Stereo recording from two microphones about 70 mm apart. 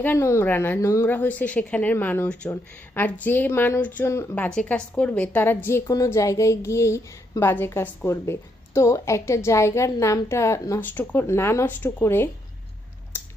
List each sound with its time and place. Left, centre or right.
0.2 s speech: left
0.4 s a woman's voice: left
0.8 s a woman's voice: left
1.0 s a woman's voice: left
3.8 s a woman's voice: left
4.0 s speech: left
4.4 s a woman's voice: centre; by 5.8 s left
6.1 s a woman's voice: left
10.8 s speech: left
13.1 s a sound: left